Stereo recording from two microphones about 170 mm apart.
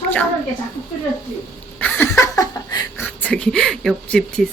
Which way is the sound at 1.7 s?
10° left (ahead or behind).